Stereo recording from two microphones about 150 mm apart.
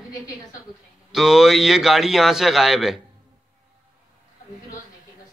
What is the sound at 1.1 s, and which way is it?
Speech, 5° right (ahead or behind).